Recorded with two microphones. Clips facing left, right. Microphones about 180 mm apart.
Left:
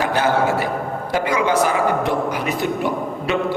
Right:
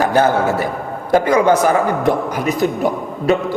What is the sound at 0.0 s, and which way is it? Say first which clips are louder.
A woman's voice: right 4 dB; 45° right (ahead or behind).